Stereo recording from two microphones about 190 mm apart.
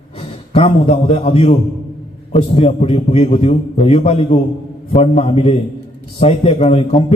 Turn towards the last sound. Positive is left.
turn(degrees=30)  # may be behind; listen again after turning